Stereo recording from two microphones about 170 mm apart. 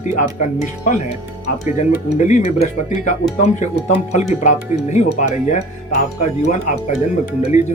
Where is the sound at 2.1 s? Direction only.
45° left (ahead or behind).